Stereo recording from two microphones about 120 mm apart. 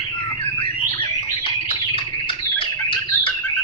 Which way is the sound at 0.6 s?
40° left (ahead or behind).